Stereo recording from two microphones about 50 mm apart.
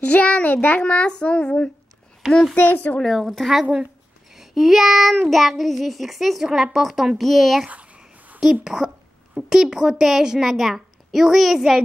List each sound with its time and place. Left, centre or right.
0.0 s a child's voice: left
0.8 s a child's voice: left
2.5 s speech: left
3.0 s a child's voice: centre
4.3 s child singing: centre
5.3 s a child's voice: centre
7.6 s a sound: right
8.4 s a child's voice: centre